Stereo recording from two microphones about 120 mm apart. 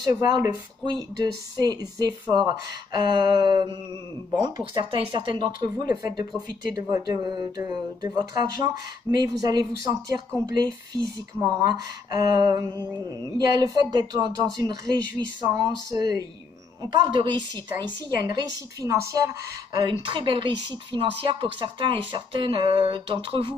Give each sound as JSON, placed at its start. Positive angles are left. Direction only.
{"t": 0.8, "sound": "speech", "side_deg": -35}
{"t": 16.8, "sound": "a woman's voice", "side_deg": -40}